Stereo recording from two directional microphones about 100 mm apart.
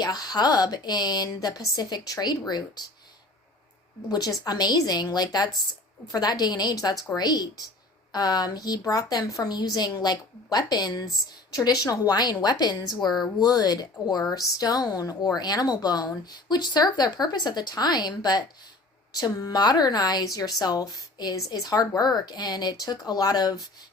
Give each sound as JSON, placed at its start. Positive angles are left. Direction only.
{"t": 0.0, "sound": "a woman's voice", "side_deg": 40}
{"t": 4.1, "sound": "a woman's voice", "side_deg": 40}